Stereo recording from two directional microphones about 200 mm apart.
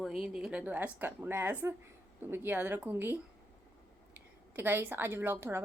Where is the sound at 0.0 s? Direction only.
5° right (ahead or behind).